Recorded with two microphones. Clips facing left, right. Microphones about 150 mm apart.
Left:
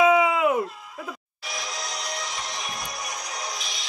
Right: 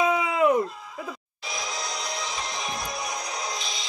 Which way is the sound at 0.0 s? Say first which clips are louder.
Left 3 dB; 5° left (ahead or behind).